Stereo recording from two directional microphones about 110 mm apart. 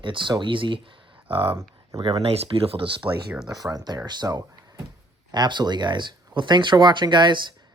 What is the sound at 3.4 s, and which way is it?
Speech, 35° right (ahead or behind).